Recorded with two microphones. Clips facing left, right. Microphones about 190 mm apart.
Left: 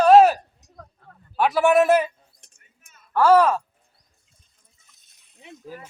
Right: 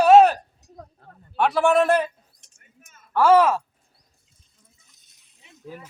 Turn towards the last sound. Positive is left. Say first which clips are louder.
# left 10 dB
turn(degrees=70)  # may be behind; listen again after turning